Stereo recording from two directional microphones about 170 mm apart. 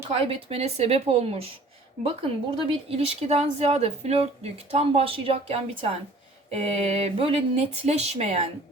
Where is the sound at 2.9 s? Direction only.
35° right (ahead or behind).